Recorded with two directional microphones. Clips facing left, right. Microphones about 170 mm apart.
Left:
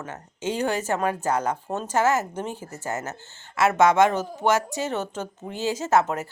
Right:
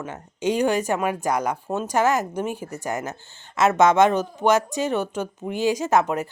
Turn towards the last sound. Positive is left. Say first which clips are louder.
# right 1 dB
turn(degrees=-15)  # may be behind; listen again after turning